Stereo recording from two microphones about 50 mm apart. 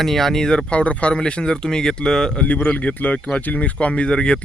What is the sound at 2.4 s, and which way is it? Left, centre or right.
Speech, left.